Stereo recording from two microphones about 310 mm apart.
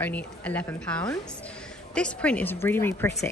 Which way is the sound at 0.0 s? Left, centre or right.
Centre.